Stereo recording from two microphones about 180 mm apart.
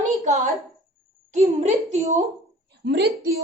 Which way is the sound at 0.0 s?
40° right (ahead or behind).